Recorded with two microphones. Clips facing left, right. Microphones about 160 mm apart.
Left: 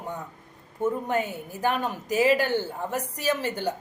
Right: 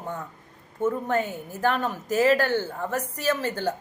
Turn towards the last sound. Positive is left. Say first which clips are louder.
# right 1 dB
turn(degrees=15)  # may be behind; listen again after turning